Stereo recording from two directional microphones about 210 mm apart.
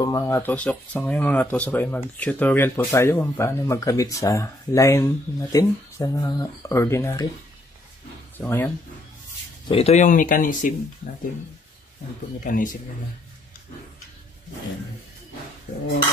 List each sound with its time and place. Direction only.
0.0 s speech: 15° left (ahead or behind)
8.4 s speech: 10° left (ahead or behind)
9.7 s speech: 30° left (ahead or behind)
12.4 s speech: 40° left (ahead or behind)